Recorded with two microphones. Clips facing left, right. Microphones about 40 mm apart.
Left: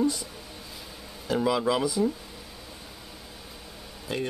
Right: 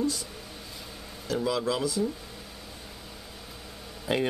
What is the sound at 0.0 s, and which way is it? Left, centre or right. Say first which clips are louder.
Speech: left 3 dB; centre.